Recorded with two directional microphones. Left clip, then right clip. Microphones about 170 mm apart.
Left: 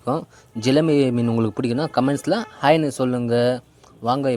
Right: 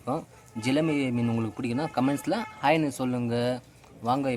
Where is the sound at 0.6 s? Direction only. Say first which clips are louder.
Left 9 dB; 35° left (ahead or behind).